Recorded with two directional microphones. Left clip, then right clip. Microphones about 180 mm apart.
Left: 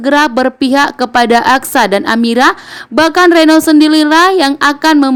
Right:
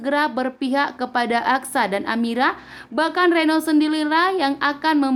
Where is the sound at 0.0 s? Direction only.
45° left (ahead or behind).